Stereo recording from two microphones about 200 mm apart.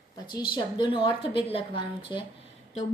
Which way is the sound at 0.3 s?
20° left (ahead or behind).